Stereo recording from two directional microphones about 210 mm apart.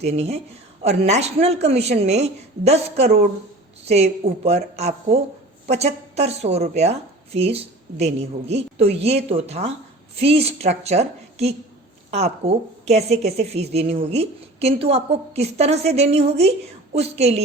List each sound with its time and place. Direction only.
0.0 s a woman's voice: 30° right (ahead or behind)